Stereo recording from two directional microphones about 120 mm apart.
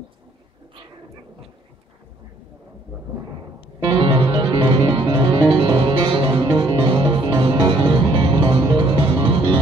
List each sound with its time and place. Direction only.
3.8 s music: 45° right (ahead or behind)